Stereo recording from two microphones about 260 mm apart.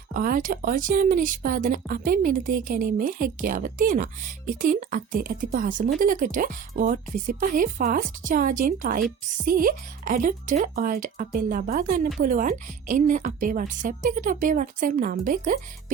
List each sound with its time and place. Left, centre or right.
0.1 s speech: right